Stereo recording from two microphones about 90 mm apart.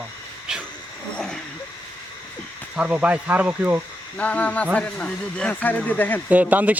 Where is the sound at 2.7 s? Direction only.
15° right (ahead or behind).